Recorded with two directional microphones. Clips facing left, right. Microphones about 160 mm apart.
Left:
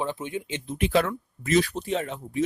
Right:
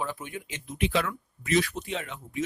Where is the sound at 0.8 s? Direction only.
40° left (ahead or behind).